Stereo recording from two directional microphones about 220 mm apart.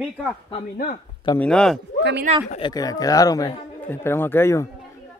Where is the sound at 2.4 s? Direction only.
25° left (ahead or behind).